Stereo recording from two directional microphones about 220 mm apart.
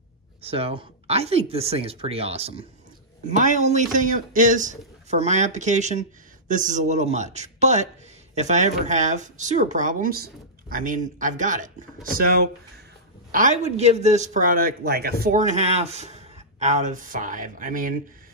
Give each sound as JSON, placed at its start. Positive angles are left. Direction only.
{"t": 0.4, "sound": "a man's voice", "side_deg": -25}
{"t": 15.2, "sound": "a man's voice", "side_deg": -35}